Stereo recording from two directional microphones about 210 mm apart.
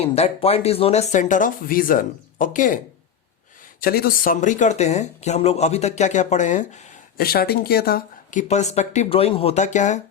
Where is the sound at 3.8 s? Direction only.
45° left (ahead or behind).